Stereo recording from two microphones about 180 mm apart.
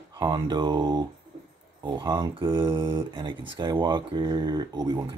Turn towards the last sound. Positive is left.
turn(degrees=-20)  # may be behind; listen again after turning